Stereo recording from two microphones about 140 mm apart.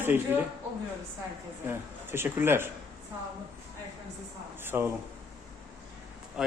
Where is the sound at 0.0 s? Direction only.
15° right (ahead or behind).